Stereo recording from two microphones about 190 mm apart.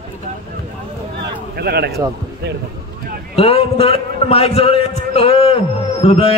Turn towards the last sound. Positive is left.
turn(degrees=30)  # may be behind; listen again after turning